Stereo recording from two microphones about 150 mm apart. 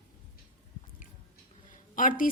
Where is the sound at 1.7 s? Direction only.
65° left (ahead or behind).